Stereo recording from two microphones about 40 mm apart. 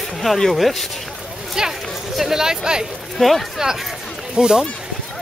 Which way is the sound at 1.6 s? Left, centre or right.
Centre.